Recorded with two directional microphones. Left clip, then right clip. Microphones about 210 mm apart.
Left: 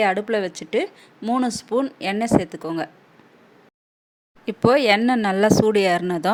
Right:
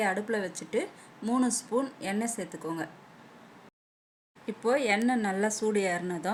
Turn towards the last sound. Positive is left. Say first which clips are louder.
# left 11 dB
turn(degrees=45)  # may be behind; listen again after turning